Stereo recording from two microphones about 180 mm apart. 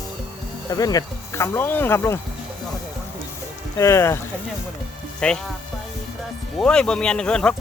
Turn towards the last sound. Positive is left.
turn(degrees=5)  # may be behind; listen again after turning